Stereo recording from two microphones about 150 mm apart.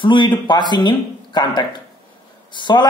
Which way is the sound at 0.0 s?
30° left (ahead or behind).